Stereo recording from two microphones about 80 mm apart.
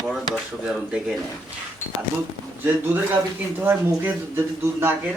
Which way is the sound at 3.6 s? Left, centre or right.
Right.